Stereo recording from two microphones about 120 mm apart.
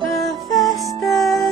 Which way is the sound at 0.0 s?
Centre (ahead or behind).